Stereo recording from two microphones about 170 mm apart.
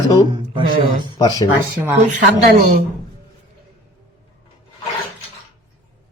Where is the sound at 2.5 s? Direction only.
65° right (ahead or behind).